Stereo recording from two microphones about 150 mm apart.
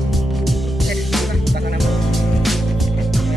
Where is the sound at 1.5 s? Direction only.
90° right.